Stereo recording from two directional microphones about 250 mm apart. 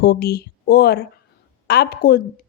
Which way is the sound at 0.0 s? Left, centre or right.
Left.